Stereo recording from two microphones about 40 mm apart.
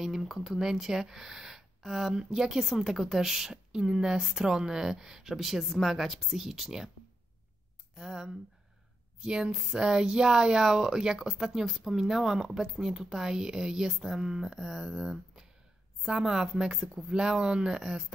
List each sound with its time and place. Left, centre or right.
0.0 s speech: centre
7.9 s speech: centre